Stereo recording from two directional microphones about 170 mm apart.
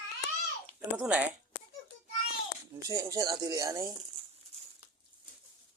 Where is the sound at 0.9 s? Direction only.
5° right (ahead or behind).